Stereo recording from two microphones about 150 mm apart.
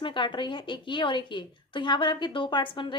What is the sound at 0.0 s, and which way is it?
A woman's voice, 35° left (ahead or behind).